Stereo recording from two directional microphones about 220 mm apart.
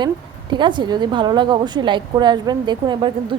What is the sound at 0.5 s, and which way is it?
Speech, 20° right (ahead or behind).